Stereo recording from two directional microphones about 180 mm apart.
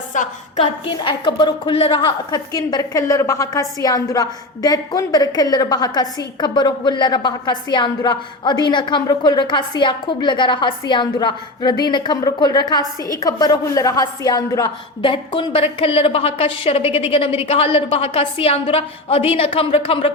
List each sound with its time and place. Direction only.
0.1 s a woman's voice: 45° left (ahead or behind)
0.6 s a woman's voice: 25° left (ahead or behind)